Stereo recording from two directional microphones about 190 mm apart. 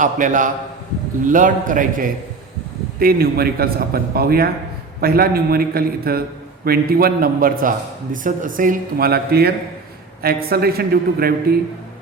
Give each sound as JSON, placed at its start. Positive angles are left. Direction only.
{"t": 0.0, "sound": "a man's voice", "side_deg": -45}